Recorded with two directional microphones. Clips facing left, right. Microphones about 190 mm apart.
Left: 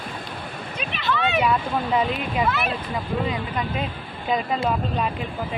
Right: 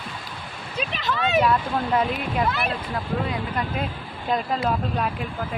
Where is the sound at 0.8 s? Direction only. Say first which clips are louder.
Left 1 dB; 40° right (ahead or behind).